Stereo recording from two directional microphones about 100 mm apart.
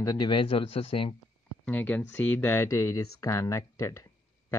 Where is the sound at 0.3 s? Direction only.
60° left (ahead or behind).